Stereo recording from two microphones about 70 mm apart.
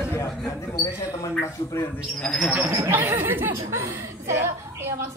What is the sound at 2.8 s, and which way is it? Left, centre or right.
A woman's voice, right.